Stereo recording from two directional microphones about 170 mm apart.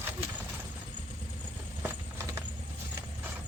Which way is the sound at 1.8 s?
15° right (ahead or behind).